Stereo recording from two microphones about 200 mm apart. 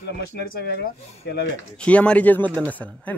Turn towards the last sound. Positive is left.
turn(degrees=5)  # may be behind; listen again after turning